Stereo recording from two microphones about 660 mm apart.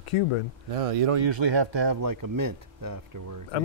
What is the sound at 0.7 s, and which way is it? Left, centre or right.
Speech, right.